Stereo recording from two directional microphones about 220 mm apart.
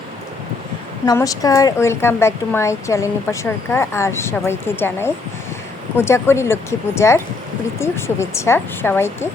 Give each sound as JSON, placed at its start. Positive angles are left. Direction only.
{"t": 1.0, "sound": "a woman's voice", "side_deg": 15}